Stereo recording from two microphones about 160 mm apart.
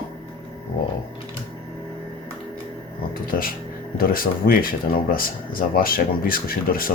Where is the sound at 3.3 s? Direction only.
65° left (ahead or behind).